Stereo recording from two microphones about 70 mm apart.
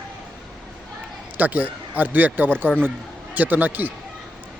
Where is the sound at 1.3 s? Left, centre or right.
Right.